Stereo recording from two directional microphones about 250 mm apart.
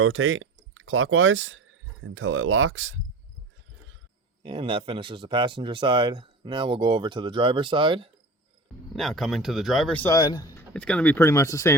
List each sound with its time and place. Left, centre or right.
0.0 s speech: right
4.4 s speech: right
8.9 s speech: centre
10.8 s speech: centre